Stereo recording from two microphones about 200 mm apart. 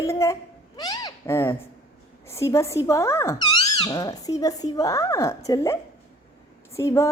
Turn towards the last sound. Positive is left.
turn(degrees=15)  # may be behind; listen again after turning